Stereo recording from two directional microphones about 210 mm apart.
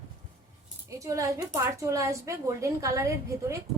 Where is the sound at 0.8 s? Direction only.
15° right (ahead or behind).